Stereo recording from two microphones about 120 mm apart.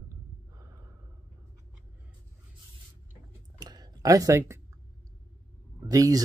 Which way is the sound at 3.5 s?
30° right (ahead or behind).